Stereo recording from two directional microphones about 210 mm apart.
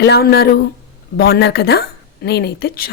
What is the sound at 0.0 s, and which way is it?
Speech, 50° left (ahead or behind).